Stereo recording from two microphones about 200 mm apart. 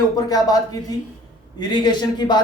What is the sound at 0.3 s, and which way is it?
Speech, 20° left (ahead or behind).